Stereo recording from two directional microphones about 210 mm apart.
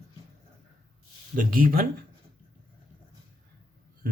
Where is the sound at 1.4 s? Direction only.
40° right (ahead or behind).